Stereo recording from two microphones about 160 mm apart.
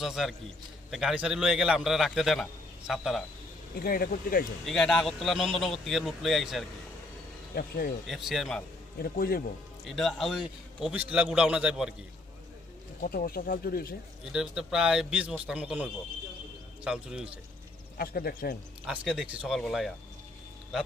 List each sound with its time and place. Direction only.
0.0 s a man's voice: centre (ahead or behind)
3.8 s speech: 70° left (ahead or behind)
4.6 s a man's voice: centre (ahead or behind)
7.5 s speech: 70° left (ahead or behind)
8.0 s a man's voice: centre (ahead or behind)
9.0 s speech: 65° left (ahead or behind)
9.8 s a man's voice: centre (ahead or behind)
13.0 s speech: 70° left (ahead or behind)
14.3 s a man's voice: 5° right (ahead or behind)
17.9 s speech: 70° left (ahead or behind)
18.9 s a man's voice: 5° right (ahead or behind)